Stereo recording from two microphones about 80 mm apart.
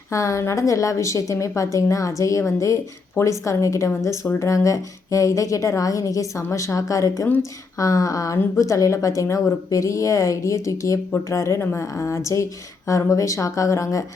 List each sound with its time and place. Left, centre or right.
0.1 s a woman's voice: left